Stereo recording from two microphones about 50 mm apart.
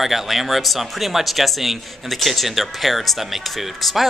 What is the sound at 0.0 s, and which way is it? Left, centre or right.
Speech, centre.